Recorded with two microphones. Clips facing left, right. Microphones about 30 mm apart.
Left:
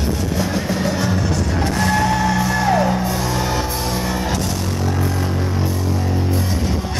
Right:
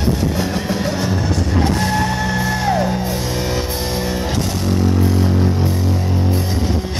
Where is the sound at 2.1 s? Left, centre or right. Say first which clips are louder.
Left 2 dB; centre.